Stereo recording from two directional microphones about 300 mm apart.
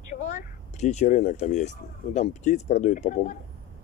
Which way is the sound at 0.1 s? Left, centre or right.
Left.